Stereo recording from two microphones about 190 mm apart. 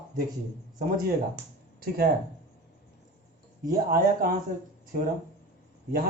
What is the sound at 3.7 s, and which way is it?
Speech, 50° right (ahead or behind).